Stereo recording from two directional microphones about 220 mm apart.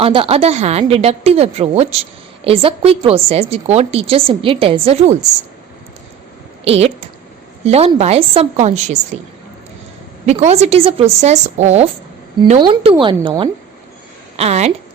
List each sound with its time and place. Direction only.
0.0 s a woman's voice: 25° right (ahead or behind)
6.7 s a woman's voice: 30° right (ahead or behind)
10.2 s a woman's voice: 30° right (ahead or behind)